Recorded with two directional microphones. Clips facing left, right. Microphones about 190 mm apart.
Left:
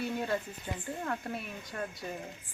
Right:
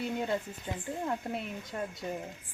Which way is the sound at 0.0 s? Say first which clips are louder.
Right 1 dB; 20° right (ahead or behind).